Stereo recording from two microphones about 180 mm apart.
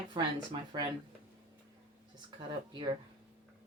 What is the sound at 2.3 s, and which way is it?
Speech, 25° right (ahead or behind).